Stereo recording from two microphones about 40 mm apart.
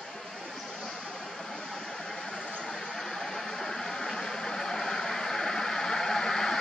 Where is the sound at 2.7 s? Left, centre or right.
Centre.